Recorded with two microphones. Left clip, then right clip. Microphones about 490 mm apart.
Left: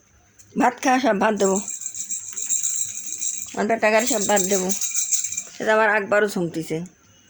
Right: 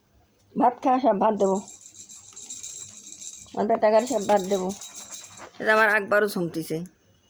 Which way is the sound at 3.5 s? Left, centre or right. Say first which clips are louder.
Left 1 dB; right.